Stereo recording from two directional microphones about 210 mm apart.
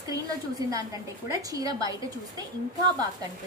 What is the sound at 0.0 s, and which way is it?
A woman's voice, 15° right (ahead or behind).